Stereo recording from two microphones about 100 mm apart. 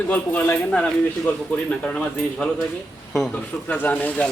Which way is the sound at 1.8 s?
15° left (ahead or behind).